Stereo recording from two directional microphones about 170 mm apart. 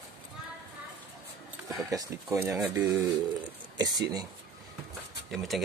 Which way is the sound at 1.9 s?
20° right (ahead or behind).